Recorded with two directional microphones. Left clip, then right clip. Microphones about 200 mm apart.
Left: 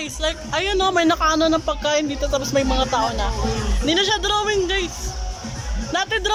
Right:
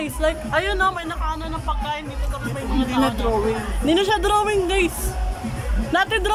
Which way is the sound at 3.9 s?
10° right (ahead or behind).